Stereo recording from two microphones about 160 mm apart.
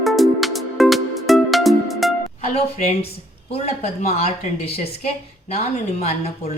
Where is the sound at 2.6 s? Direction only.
40° left (ahead or behind).